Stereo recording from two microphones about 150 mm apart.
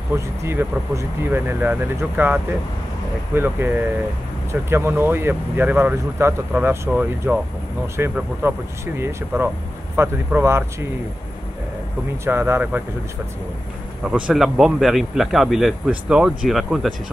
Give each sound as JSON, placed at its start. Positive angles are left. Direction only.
{"t": 0.1, "sound": "speech", "side_deg": -15}
{"t": 12.3, "sound": "speech", "side_deg": -15}
{"t": 14.0, "sound": "a man's voice", "side_deg": -5}